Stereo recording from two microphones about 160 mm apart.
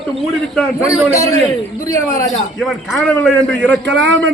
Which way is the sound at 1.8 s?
20° left (ahead or behind).